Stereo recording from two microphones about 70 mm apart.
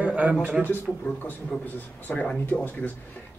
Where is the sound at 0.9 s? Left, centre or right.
Centre.